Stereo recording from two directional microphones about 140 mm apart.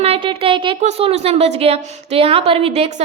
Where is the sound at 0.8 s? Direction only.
50° right (ahead or behind).